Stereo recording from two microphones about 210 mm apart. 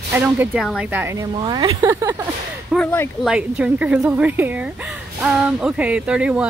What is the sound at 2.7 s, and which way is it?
Speech, 10° left (ahead or behind).